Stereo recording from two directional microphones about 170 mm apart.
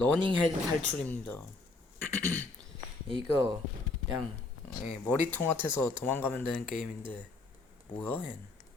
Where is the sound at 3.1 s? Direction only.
25° right (ahead or behind).